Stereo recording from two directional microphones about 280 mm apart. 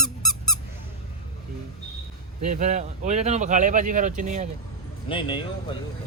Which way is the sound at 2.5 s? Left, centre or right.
Right.